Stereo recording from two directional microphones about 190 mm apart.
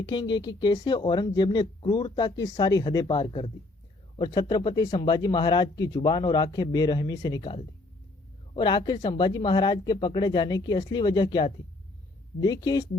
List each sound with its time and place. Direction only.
0.0 s speech: 25° left (ahead or behind)